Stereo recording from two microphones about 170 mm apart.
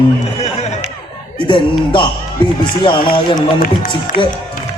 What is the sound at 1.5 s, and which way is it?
A man's voice, 30° left (ahead or behind).